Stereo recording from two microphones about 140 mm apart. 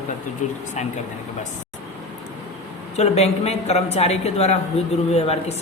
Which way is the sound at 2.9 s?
50° left (ahead or behind).